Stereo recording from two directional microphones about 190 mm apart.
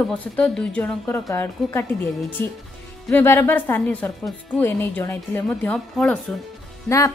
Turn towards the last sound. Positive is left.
turn(degrees=15)  # may be behind; listen again after turning